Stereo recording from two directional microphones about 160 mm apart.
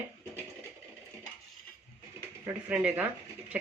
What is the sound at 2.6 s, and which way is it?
Speech, 10° right (ahead or behind).